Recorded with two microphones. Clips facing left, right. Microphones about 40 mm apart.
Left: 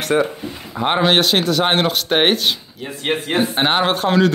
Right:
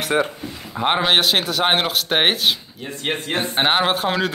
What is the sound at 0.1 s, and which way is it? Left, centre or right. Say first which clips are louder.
Speech: left 3 dB; right.